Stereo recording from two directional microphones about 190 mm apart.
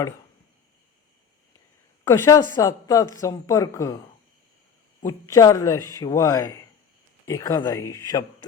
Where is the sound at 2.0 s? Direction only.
15° left (ahead or behind).